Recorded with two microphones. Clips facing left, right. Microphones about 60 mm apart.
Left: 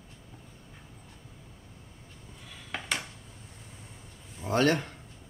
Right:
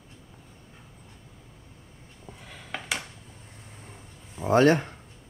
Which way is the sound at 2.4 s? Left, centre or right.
Right.